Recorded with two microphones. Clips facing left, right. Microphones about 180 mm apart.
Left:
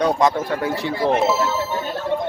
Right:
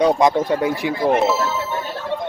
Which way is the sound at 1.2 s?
Centre (ahead or behind).